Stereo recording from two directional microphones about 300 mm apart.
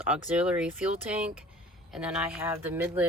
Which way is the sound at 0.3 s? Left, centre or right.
Centre.